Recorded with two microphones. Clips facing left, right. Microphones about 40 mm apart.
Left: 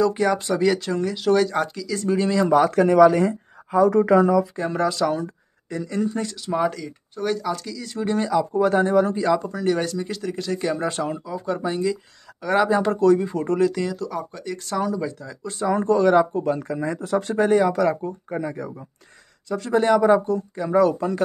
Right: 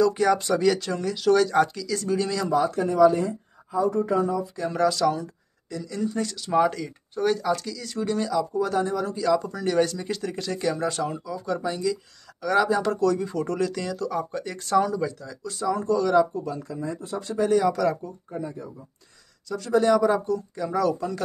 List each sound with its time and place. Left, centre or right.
0.0 s speech: centre
2.5 s speech: left
4.6 s speech: centre
5.1 s speech: left
6.1 s speech: centre
6.5 s speech: centre
8.1 s speech: left; by 10.7 s centre
10.7 s speech: centre
15.4 s speech: left
16.7 s speech: left
17.6 s speech: left
18.3 s speech: left
19.5 s speech: left